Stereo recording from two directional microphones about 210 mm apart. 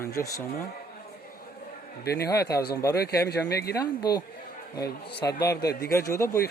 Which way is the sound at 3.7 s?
20° left (ahead or behind).